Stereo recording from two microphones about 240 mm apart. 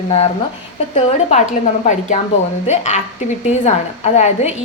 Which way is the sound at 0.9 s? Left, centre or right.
Left.